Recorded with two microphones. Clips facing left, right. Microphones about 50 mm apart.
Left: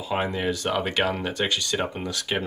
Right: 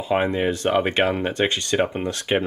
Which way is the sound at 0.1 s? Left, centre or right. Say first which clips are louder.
Right 5 dB; right.